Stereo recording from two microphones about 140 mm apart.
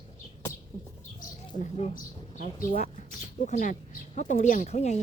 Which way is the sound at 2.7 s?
60° left (ahead or behind).